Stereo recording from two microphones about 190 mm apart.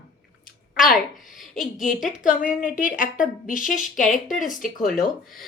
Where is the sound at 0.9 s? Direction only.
Centre (ahead or behind).